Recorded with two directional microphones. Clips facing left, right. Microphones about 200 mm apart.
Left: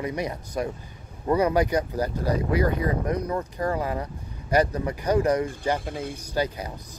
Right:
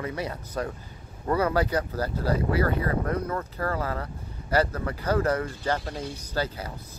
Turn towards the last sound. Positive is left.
turn(degrees=15)  # may be behind; listen again after turning